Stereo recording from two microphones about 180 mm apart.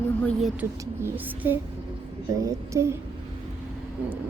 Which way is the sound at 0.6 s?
10° right (ahead or behind).